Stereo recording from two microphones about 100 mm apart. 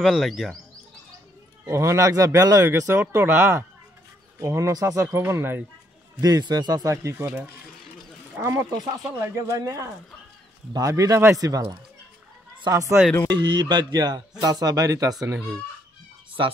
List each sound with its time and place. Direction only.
0.0 s speech: centre (ahead or behind)
1.7 s speech: 30° right (ahead or behind)
6.2 s speech: 40° right (ahead or behind)
8.4 s speech: 30° right (ahead or behind)
12.6 s speech: 35° right (ahead or behind)
13.3 s speech: 50° right (ahead or behind)